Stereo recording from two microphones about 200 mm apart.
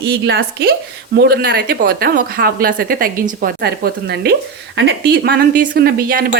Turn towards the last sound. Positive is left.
turn(degrees=-45)  # may be behind; listen again after turning